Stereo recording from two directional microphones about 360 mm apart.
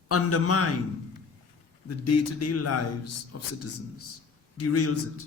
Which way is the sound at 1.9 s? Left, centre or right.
Left.